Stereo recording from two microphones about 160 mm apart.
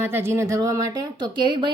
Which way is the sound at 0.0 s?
15° right (ahead or behind).